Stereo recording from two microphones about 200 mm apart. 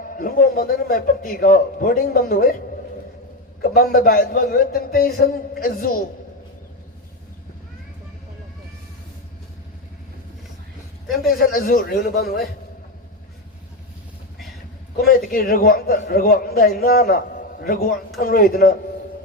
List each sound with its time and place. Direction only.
0.0 s a man's voice: 45° left (ahead or behind)
3.6 s a man's voice: 45° left (ahead or behind)
11.2 s a man's voice: 45° left (ahead or behind)
15.0 s a man's voice: 45° left (ahead or behind)